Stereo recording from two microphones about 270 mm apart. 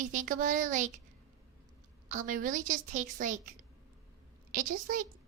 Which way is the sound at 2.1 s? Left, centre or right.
Right.